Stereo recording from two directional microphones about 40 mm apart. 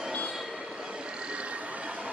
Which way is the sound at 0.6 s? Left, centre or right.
Centre.